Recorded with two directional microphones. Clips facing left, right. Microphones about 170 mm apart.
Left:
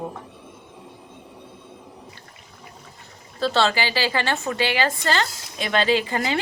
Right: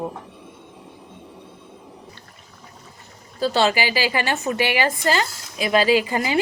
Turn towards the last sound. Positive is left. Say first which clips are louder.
# right 3 dB
turn(degrees=-15)  # may be behind; listen again after turning